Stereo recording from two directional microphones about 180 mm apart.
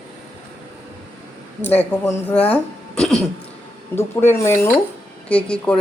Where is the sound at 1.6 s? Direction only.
10° left (ahead or behind).